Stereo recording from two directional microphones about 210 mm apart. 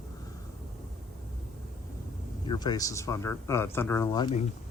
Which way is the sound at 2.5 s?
20° left (ahead or behind).